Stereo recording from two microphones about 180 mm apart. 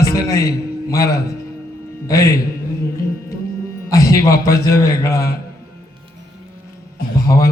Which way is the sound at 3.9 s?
15° left (ahead or behind).